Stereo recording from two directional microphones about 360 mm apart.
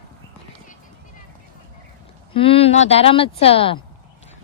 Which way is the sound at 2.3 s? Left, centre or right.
Centre.